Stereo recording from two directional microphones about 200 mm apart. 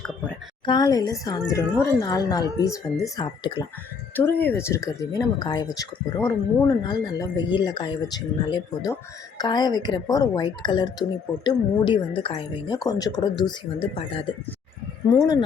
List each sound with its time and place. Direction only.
0.6 s a woman's voice: 20° left (ahead or behind)
4.1 s a woman's voice: 10° left (ahead or behind)
15.1 s speech: 20° left (ahead or behind)